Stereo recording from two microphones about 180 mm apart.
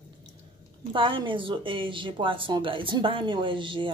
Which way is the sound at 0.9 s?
30° right (ahead or behind).